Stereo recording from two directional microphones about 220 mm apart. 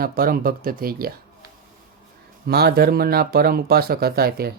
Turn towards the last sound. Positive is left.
turn(degrees=-45)  # may be behind; listen again after turning